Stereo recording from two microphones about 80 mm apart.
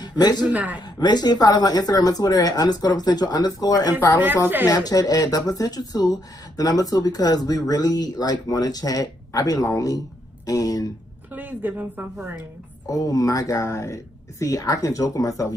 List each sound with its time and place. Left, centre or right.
0.0 s a woman's voice: left
0.5 s speech: centre
0.7 s speech: left
11.3 s speech: right
12.4 s speech: left